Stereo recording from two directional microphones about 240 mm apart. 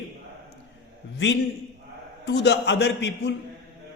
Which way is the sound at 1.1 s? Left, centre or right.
Left.